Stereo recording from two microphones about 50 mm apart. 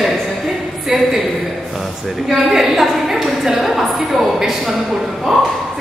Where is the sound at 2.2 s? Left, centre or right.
Centre.